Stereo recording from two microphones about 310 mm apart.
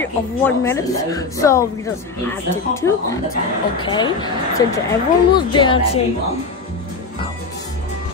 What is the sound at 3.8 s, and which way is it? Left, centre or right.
Speech, centre.